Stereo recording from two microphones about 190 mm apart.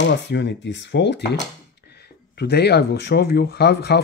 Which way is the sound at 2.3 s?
60° left (ahead or behind).